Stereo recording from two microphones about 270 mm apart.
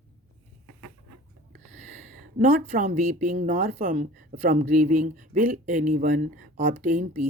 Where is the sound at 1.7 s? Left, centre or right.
Right.